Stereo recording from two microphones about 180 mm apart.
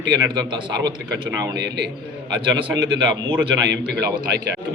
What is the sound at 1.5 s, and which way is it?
Speech, 70° right (ahead or behind).